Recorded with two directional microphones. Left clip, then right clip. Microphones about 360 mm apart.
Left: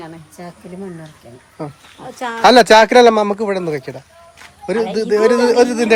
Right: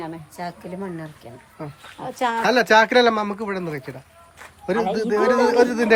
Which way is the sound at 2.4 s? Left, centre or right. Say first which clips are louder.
Left 9 dB; centre.